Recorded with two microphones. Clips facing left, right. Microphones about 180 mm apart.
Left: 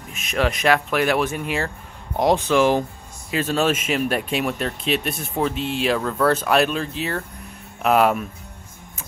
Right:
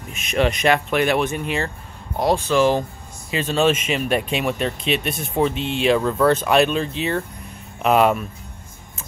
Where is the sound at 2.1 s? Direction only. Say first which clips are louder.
Left 1 dB; 20° left (ahead or behind).